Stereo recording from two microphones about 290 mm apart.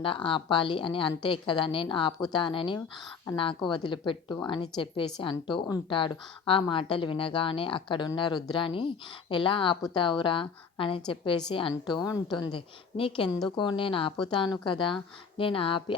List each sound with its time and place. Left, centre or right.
0.0 s a woman's voice: centre